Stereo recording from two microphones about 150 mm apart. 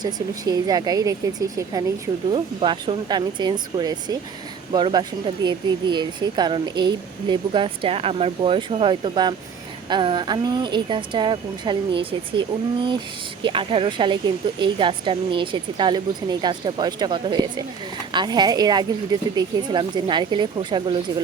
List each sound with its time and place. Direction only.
0.0 s speech: 25° right (ahead or behind)